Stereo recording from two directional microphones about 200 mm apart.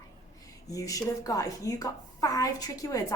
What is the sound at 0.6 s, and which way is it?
A woman's voice, 15° left (ahead or behind).